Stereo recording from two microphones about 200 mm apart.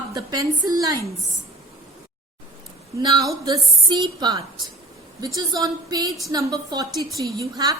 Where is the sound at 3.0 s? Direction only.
20° right (ahead or behind).